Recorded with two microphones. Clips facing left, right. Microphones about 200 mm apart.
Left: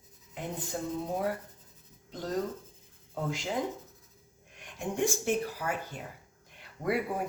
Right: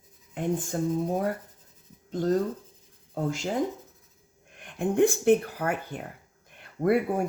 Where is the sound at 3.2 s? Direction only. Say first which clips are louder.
Right 5 dB; 45° right (ahead or behind).